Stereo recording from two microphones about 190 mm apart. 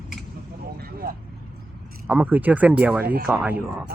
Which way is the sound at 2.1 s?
5° right (ahead or behind).